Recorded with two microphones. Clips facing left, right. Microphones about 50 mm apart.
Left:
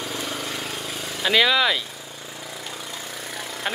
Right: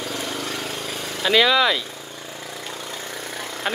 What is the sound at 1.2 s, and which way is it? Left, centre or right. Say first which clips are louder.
Speech: right 2 dB; centre.